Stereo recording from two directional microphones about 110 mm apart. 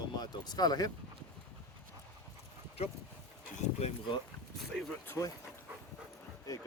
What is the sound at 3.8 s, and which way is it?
Speech, 90° left.